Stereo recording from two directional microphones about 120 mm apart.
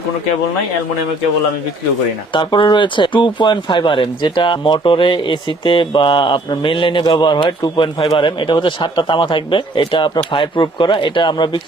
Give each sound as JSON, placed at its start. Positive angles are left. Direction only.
{"t": 2.3, "sound": "speech", "side_deg": 40}